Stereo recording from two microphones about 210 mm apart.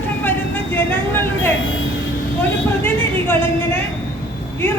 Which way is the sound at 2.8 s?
10° left (ahead or behind).